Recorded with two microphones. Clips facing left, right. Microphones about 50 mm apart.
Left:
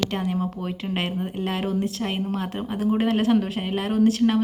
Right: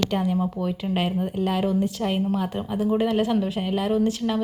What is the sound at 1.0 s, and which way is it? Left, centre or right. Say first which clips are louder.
A woman's voice: right 3 dB; centre.